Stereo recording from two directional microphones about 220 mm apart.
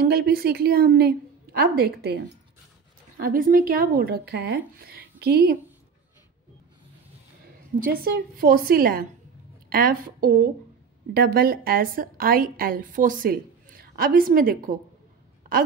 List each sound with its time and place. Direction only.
0.0 s speech: 45° right (ahead or behind)
7.8 s a woman's voice: 45° right (ahead or behind)